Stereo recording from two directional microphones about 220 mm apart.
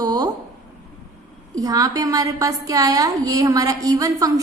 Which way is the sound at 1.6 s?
15° right (ahead or behind).